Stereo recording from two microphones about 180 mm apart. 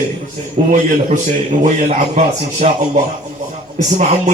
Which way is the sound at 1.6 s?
40° right (ahead or behind).